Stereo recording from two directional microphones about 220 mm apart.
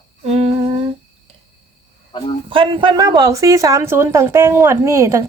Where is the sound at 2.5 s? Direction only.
25° right (ahead or behind).